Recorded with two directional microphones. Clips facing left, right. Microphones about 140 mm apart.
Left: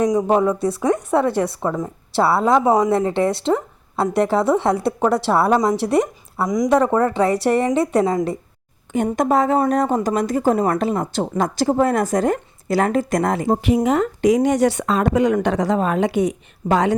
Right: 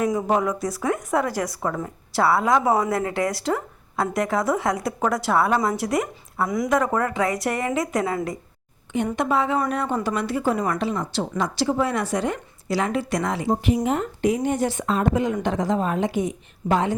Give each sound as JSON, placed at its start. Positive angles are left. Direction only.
{"t": 0.3, "sound": "a woman's voice", "side_deg": 30}
{"t": 2.6, "sound": "a woman's voice", "side_deg": 15}
{"t": 6.7, "sound": "a woman's voice", "side_deg": 30}
{"t": 9.1, "sound": "speech", "side_deg": 40}
{"t": 13.8, "sound": "speech", "side_deg": 90}